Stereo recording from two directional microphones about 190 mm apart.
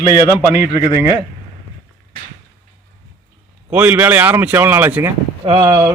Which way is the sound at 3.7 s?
10° right (ahead or behind).